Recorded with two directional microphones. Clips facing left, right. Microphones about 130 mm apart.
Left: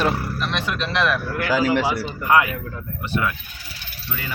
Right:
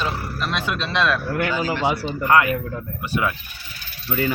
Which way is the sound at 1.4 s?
90° left.